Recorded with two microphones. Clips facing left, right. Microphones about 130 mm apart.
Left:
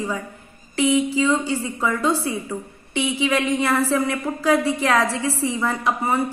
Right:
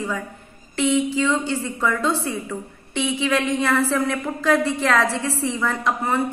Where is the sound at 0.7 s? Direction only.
5° left (ahead or behind).